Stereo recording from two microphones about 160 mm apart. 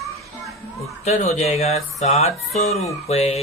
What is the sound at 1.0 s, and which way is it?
Speech, 45° left (ahead or behind).